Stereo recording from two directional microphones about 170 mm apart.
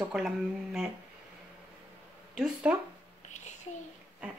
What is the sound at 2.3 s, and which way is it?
Speech, 5° right (ahead or behind).